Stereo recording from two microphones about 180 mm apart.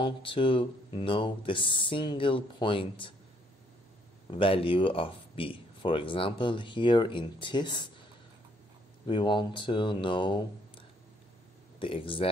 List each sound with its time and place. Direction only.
0.0 s speech: 30° left (ahead or behind)
4.3 s speech: 30° left (ahead or behind)
9.0 s speech: 25° left (ahead or behind)
11.8 s speech: 30° left (ahead or behind)